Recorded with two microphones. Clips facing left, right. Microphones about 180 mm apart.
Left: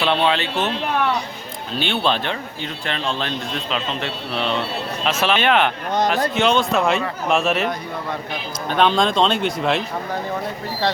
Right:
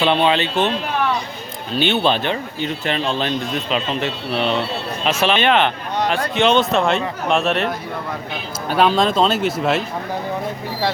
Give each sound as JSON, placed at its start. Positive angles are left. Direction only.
{"t": 0.0, "sound": "speech", "side_deg": -5}
{"t": 1.7, "sound": "speech", "side_deg": 0}
{"t": 8.7, "sound": "speech", "side_deg": -5}